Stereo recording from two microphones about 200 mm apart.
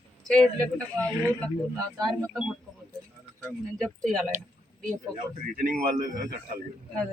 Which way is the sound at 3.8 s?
5° left (ahead or behind).